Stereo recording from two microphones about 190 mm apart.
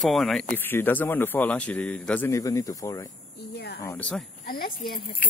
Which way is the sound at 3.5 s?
60° left (ahead or behind).